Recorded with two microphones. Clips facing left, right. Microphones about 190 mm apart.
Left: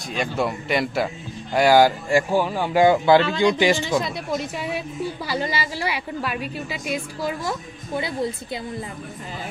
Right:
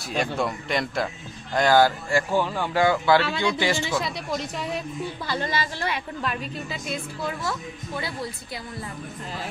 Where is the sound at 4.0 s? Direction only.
5° left (ahead or behind).